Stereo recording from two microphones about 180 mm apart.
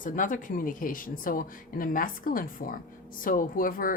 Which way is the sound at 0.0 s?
50° left (ahead or behind).